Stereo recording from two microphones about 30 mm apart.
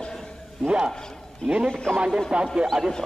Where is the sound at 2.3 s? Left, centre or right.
Right.